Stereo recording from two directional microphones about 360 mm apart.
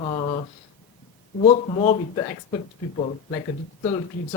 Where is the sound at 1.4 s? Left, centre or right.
Centre.